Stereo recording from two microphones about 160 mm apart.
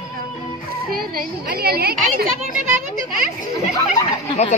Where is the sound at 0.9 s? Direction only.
70° right (ahead or behind).